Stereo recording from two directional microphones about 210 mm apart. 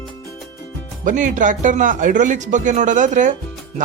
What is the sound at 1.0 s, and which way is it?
Speech, 35° right (ahead or behind).